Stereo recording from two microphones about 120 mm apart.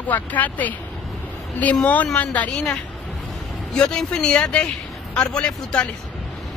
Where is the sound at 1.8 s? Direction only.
10° left (ahead or behind).